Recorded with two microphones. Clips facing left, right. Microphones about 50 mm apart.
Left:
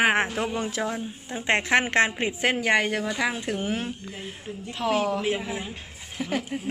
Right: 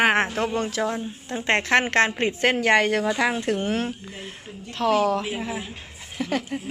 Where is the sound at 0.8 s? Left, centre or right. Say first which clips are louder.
Right 3 dB; centre.